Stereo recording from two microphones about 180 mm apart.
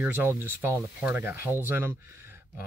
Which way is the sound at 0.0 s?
15° right (ahead or behind).